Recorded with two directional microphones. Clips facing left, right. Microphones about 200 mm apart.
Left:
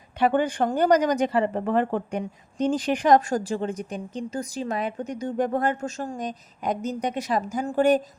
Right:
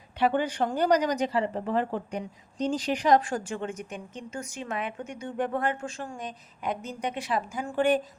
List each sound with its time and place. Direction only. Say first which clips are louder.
0.2 s a woman's voice: left 3 dB; 50° left (ahead or behind)